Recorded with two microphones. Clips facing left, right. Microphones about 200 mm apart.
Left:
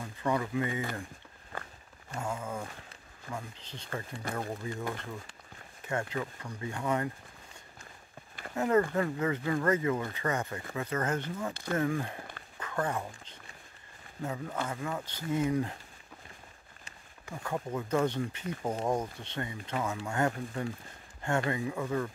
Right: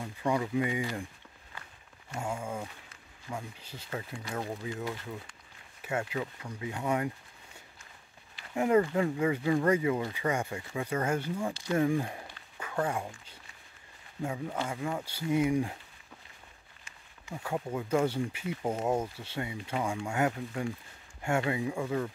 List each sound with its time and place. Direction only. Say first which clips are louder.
0.0 s speech: right 1 dB; 10° right (ahead or behind)
1.5 s walk: left 8 dB; 50° left (ahead or behind)
2.1 s speech: right 1 dB; 10° right (ahead or behind)
8.5 s speech: right 1 dB; 10° right (ahead or behind)
17.4 s speech: right 1 dB; 10° right (ahead or behind)